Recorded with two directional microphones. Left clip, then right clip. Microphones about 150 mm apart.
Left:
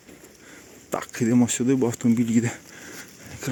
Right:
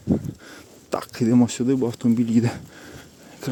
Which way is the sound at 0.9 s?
20° right (ahead or behind).